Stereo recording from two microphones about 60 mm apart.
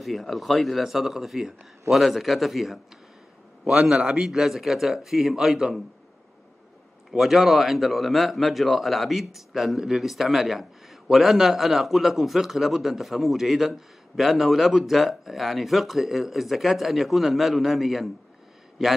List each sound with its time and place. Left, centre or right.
0.0 s speech: centre
4.0 s a man's voice: centre
4.3 s speech: centre
7.1 s speech: centre